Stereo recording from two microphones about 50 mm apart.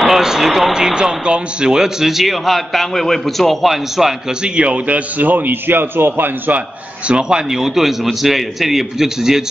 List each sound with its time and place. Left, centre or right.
0.0 s speech: centre
4.4 s a man's voice: right
7.1 s a man's voice: centre